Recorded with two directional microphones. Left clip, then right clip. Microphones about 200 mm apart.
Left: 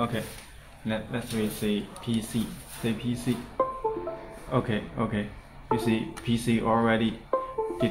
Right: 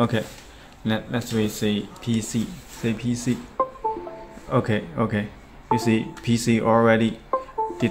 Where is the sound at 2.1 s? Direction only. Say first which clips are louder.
Right 4 dB; 35° right (ahead or behind).